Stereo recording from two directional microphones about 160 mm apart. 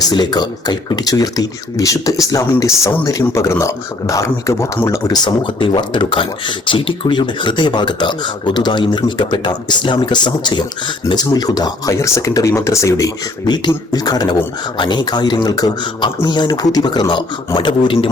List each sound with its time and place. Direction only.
0.1 s speech: 25° left (ahead or behind)